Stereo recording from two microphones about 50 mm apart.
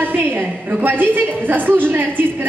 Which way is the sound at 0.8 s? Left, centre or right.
Right.